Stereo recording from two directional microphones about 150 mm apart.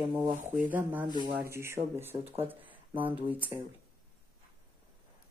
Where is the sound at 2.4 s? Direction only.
10° right (ahead or behind).